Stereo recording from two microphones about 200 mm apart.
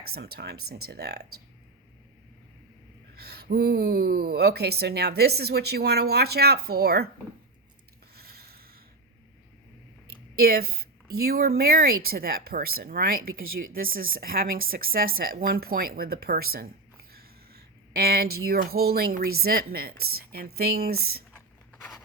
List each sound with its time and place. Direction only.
0.1 s speech: 50° right (ahead or behind)
3.2 s speech: 55° right (ahead or behind)
8.1 s a sound: 50° right (ahead or behind)
10.3 s speech: 50° right (ahead or behind)